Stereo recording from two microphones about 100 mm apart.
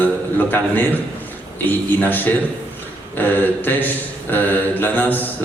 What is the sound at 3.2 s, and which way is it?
Mantra, 20° left (ahead or behind).